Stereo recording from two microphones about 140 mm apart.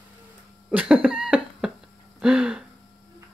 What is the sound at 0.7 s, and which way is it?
Cough, 10° right (ahead or behind).